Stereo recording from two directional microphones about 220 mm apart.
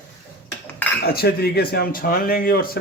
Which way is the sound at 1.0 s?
45° left (ahead or behind).